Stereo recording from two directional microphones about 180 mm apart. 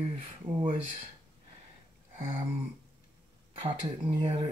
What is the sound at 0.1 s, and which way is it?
Speech, 35° right (ahead or behind).